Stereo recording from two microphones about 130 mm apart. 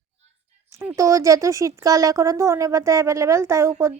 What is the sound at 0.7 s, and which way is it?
Speech, 20° right (ahead or behind).